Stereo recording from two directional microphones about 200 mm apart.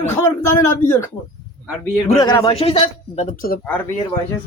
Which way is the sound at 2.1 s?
20° left (ahead or behind).